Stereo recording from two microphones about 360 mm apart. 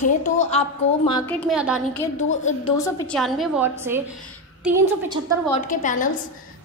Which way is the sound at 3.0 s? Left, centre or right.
Centre.